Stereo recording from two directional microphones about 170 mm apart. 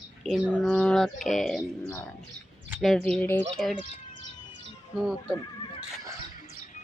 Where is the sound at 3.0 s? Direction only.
10° left (ahead or behind).